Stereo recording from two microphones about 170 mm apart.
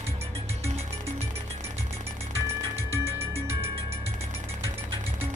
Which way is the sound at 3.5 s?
35° right (ahead or behind).